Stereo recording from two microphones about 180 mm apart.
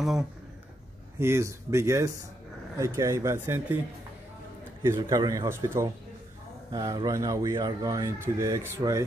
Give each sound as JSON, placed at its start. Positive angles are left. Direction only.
{"t": 0.0, "sound": "speech", "side_deg": 0}
{"t": 1.2, "sound": "speech", "side_deg": -15}
{"t": 4.8, "sound": "speech", "side_deg": -20}